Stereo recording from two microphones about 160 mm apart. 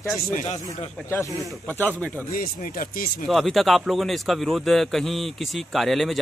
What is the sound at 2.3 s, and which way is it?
Speech, 60° left (ahead or behind).